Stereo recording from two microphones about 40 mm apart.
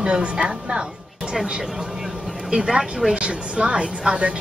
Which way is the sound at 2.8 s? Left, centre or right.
Centre.